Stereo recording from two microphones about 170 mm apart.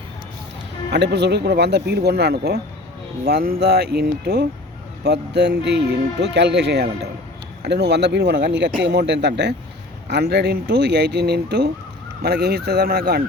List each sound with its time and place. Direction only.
0.9 s speech: 85° right
5.0 s a man's voice: 80° right
10.1 s speech: 75° right (ahead or behind)